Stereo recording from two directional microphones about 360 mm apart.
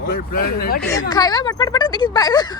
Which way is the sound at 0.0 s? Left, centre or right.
Left.